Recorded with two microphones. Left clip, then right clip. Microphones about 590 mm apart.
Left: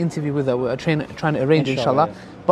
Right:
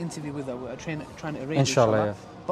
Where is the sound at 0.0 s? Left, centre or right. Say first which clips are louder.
Left 12 dB; left.